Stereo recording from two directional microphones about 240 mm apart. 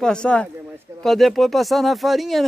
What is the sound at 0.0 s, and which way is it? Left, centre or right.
Speech, centre.